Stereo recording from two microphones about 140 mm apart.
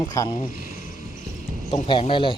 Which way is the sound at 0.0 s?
25° left (ahead or behind).